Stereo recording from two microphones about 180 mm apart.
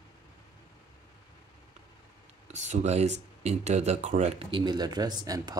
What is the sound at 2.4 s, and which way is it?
Speech, 40° right (ahead or behind).